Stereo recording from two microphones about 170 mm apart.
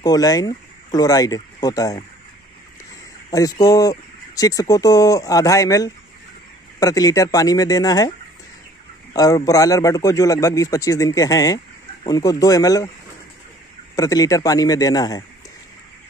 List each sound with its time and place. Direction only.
0.0 s speech: 20° left (ahead or behind)
3.3 s speech: 20° left (ahead or behind)
9.1 s speech: 20° left (ahead or behind)
13.9 s speech: 20° left (ahead or behind)